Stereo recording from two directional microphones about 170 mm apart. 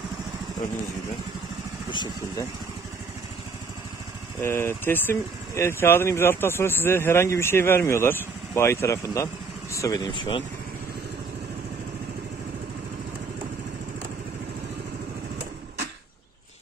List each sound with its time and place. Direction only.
1.9 s speech: 25° left (ahead or behind)
4.4 s speech: 15° left (ahead or behind)